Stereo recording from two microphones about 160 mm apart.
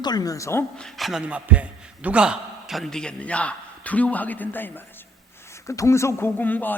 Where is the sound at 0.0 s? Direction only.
25° left (ahead or behind).